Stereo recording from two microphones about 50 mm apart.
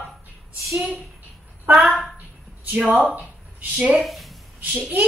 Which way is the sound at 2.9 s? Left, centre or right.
Right.